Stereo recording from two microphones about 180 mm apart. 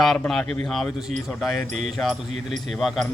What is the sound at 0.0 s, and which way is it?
A man's voice, centre (ahead or behind).